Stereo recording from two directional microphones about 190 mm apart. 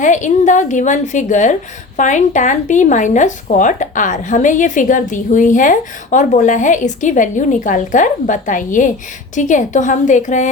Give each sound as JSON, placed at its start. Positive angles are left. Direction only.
{"t": 0.0, "sound": "speech", "side_deg": 40}